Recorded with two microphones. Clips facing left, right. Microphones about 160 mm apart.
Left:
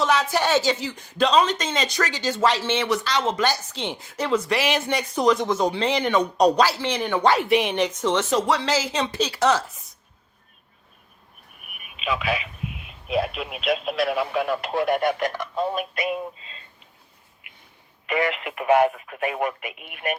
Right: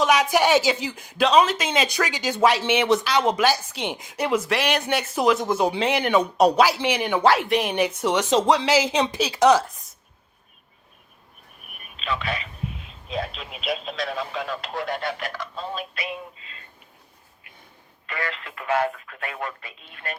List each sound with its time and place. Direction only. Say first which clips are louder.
0.0 s speech: right 2 dB; 15° right (ahead or behind)
11.8 s a sound: left 2 dB; 10° left (ahead or behind)
13.1 s speech: left 6 dB; 10° left (ahead or behind)
15.5 s synthetic singing: left 7 dB; 55° left (ahead or behind)
18.0 s speech: left 8 dB; 20° left (ahead or behind)